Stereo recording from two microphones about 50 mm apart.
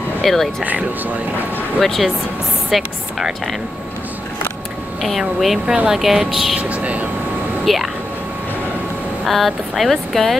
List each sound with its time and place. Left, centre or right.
0.2 s speech: centre
1.8 s speech: centre
5.4 s speech: centre
6.6 s speech: right
7.6 s speech: centre
9.2 s speech: centre